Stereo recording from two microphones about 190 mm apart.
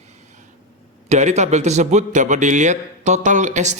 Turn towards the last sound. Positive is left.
turn(degrees=-40)  # may be behind; listen again after turning